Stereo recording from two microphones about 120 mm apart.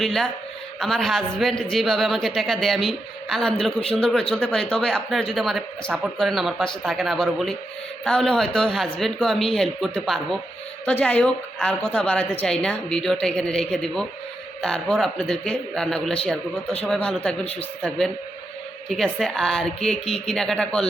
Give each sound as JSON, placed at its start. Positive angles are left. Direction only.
{"t": 0.0, "sound": "a woman's voice", "side_deg": 5}
{"t": 17.4, "sound": "speech", "side_deg": 55}
{"t": 17.8, "sound": "a woman's voice", "side_deg": 5}